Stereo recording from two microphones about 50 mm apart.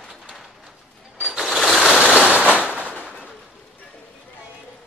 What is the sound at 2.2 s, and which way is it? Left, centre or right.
Firecracker, right.